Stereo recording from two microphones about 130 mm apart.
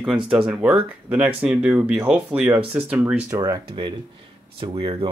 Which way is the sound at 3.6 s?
40° right (ahead or behind).